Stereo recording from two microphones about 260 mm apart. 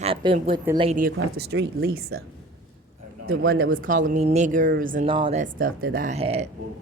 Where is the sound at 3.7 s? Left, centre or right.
Right.